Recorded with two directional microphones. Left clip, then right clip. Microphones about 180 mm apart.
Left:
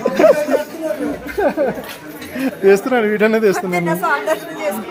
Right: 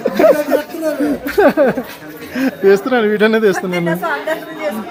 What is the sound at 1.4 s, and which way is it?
Speech, 45° right (ahead or behind).